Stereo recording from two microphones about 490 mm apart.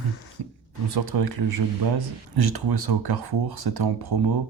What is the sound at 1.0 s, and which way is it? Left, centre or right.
Speech, right.